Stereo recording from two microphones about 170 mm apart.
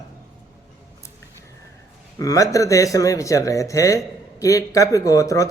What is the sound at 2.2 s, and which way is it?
Mantra, 20° left (ahead or behind).